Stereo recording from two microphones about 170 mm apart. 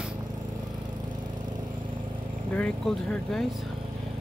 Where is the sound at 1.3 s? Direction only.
25° right (ahead or behind).